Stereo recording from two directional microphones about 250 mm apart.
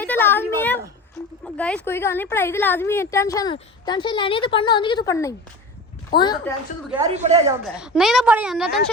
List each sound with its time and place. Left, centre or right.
0.0 s a sound: centre
1.5 s a woman's voice: centre
7.1 s speech: right
7.4 s a woman's voice: centre